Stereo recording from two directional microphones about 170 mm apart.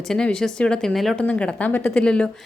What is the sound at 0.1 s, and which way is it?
A woman's voice, 5° left (ahead or behind).